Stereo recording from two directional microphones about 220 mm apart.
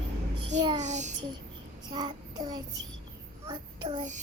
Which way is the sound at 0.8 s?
30° right (ahead or behind).